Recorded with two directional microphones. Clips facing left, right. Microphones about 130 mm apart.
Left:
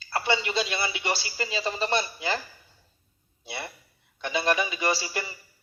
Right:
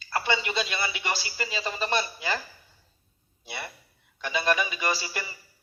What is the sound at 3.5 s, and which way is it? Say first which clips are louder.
A man's voice: left 1 dB; 20° left (ahead or behind).